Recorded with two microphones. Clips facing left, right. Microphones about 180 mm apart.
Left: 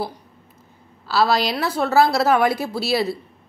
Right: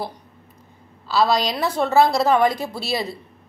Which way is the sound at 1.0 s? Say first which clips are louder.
Even; 5° left (ahead or behind).